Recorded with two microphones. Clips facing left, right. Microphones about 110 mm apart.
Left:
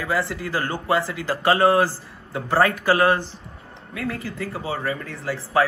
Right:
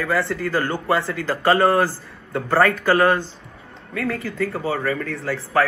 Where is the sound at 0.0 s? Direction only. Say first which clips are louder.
Right 3 dB; 15° left (ahead or behind).